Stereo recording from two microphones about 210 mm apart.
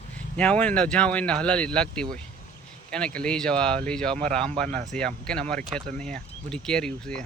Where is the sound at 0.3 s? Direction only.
5° left (ahead or behind).